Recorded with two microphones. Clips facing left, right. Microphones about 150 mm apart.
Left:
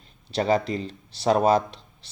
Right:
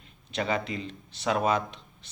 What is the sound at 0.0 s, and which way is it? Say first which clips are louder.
Speech: left 6 dB; 35° left (ahead or behind).